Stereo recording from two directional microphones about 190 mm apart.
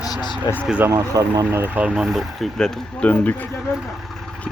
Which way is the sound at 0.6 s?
5° right (ahead or behind).